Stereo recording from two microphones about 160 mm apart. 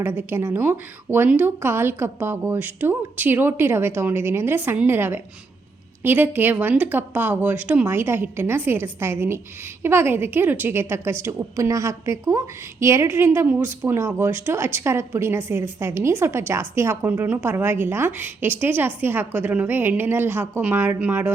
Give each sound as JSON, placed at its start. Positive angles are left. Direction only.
{"t": 0.0, "sound": "a woman's voice", "side_deg": -15}